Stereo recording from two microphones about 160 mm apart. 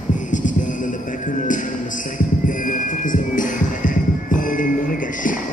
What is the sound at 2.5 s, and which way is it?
Music, 55° left (ahead or behind).